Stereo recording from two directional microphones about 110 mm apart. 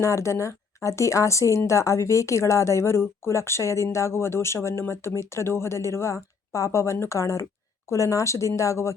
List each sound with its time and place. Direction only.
0.0 s a woman's voice: 25° left (ahead or behind)